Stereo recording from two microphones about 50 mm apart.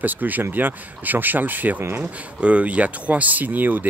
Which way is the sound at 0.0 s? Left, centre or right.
Right.